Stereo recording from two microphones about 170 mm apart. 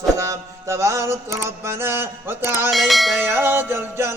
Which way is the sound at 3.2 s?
10° right (ahead or behind).